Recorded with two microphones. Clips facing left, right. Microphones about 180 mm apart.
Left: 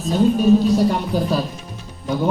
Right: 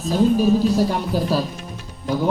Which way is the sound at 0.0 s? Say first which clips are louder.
Left 1 dB; centre (ahead or behind).